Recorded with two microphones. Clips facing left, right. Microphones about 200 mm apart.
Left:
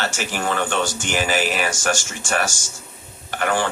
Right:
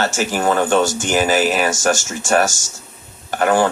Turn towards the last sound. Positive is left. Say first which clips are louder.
# right 6 dB
turn(degrees=-40)  # may be behind; listen again after turning